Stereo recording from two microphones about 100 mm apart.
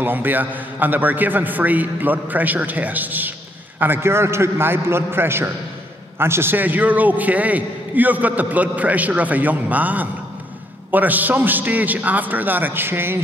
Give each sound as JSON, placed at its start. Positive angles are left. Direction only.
{"t": 0.0, "sound": "a man's voice", "side_deg": -20}